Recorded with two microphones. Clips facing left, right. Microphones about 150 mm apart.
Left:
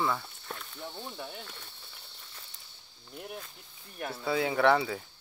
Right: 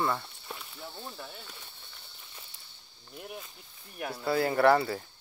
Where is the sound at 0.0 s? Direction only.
Centre (ahead or behind).